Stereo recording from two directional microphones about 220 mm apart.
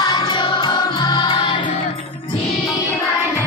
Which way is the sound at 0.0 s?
15° left (ahead or behind).